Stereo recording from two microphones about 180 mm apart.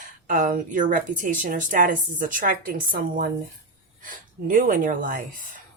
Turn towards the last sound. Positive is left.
turn(degrees=-50)  # may be behind; listen again after turning